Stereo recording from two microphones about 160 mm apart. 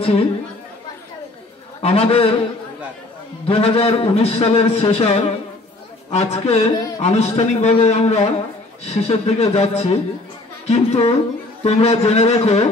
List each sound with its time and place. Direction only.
0.0 s a man's voice: 35° left (ahead or behind)
1.8 s a man's voice: 40° left (ahead or behind)
3.4 s a man's voice: 40° left (ahead or behind)